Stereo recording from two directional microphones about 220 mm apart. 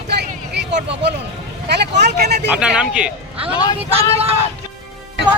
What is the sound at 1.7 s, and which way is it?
Vehicle, 50° right (ahead or behind).